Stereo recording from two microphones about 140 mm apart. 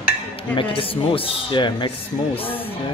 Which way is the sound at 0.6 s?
40° left (ahead or behind).